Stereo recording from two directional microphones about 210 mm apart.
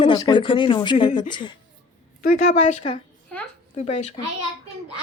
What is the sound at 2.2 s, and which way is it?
A woman's voice, 35° left (ahead or behind).